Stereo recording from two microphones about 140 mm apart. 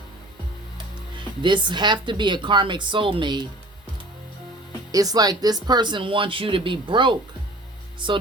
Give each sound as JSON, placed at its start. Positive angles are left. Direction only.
{"t": 1.2, "sound": "speech", "side_deg": -35}
{"t": 4.9, "sound": "speech", "side_deg": -25}